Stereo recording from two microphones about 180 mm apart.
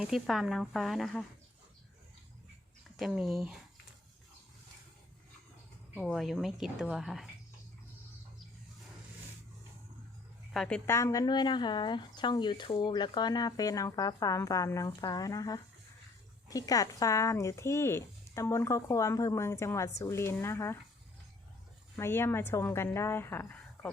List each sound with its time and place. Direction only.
0.0 s a woman's voice: centre (ahead or behind)
3.0 s a woman's voice: centre (ahead or behind)
6.0 s a woman's voice: centre (ahead or behind)
10.5 s a woman's voice: centre (ahead or behind)
10.8 s speech: 15° left (ahead or behind)
21.9 s speech: 15° left (ahead or behind)